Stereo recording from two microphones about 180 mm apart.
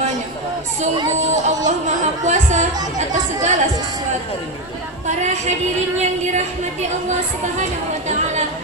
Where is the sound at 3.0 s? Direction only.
40° right (ahead or behind).